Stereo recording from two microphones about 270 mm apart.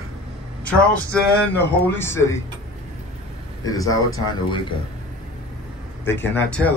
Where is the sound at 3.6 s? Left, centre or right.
Centre.